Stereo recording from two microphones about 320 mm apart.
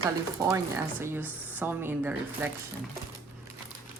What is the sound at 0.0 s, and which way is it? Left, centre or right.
Speech, centre.